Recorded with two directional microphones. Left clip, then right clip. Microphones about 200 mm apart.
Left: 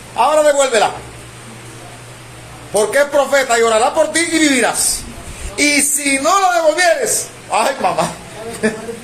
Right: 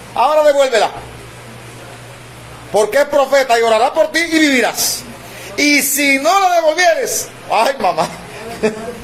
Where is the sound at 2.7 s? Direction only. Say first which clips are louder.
Right 1 dB; 35° right (ahead or behind).